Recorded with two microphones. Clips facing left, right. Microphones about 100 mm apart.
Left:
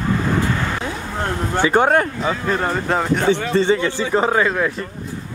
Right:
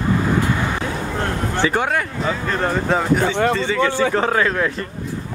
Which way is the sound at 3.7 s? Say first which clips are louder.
Left 1 dB; 30° left (ahead or behind).